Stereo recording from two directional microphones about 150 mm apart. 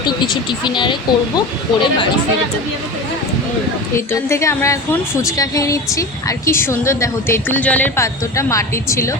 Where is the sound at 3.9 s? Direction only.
20° left (ahead or behind).